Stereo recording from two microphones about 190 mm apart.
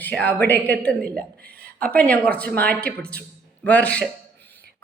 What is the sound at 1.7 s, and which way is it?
Speech, 5° left (ahead or behind).